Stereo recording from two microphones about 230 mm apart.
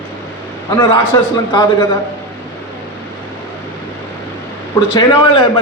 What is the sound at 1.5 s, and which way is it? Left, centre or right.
Speech, centre.